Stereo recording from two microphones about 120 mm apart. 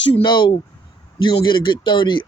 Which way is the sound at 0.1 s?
40° left (ahead or behind).